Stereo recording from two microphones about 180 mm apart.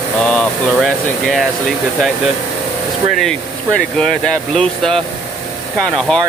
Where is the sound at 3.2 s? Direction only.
5° left (ahead or behind).